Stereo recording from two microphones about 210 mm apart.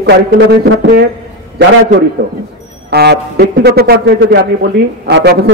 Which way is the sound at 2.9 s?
50° right (ahead or behind).